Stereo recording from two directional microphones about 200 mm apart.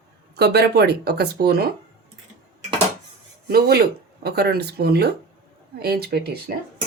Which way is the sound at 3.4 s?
50° right (ahead or behind).